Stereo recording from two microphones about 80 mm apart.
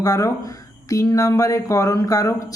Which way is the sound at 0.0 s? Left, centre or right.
Left.